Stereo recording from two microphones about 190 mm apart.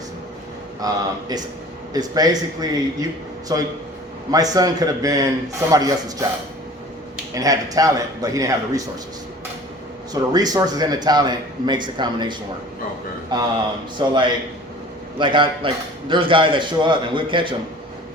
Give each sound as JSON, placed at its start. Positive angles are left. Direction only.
{"t": 0.8, "sound": "a man's voice", "side_deg": -20}
{"t": 7.3, "sound": "a man's voice", "side_deg": -20}
{"t": 10.1, "sound": "a man's voice", "side_deg": -20}
{"t": 15.2, "sound": "a man's voice", "side_deg": -25}